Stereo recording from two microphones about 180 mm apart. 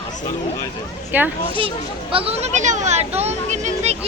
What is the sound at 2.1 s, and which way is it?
Speech, 30° right (ahead or behind).